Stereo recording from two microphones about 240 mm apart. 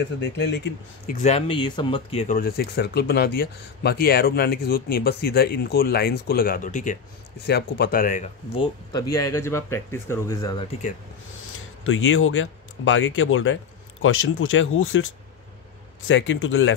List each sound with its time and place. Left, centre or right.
0.2 s speech: left
1.0 s speech: left
7.4 s speech: left
9.1 s speech: centre
11.8 s speech: left
16.1 s speech: left